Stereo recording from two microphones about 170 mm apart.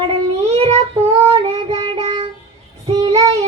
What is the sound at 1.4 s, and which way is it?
Child singing, 35° right (ahead or behind).